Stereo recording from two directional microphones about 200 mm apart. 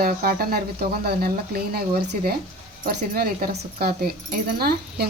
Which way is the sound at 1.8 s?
50° right (ahead or behind).